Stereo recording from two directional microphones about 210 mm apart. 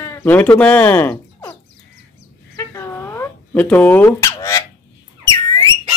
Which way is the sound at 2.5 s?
15° left (ahead or behind).